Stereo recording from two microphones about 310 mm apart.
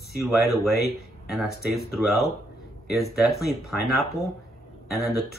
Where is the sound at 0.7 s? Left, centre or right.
Left.